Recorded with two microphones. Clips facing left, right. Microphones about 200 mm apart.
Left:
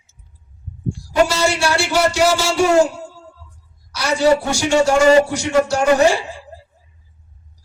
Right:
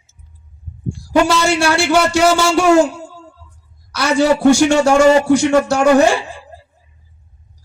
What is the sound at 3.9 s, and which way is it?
A man's voice, 55° right (ahead or behind).